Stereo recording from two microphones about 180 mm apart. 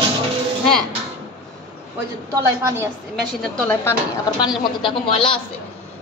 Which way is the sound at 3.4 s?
5° left (ahead or behind).